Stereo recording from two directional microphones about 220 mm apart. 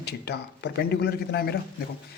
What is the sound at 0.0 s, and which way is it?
Speech, 50° left (ahead or behind).